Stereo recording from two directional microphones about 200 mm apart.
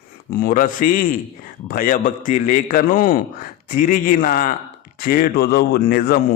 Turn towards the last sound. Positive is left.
turn(degrees=45)  # may be behind; listen again after turning